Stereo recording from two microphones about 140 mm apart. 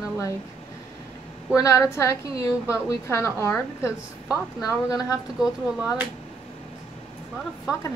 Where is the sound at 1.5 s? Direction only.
25° left (ahead or behind).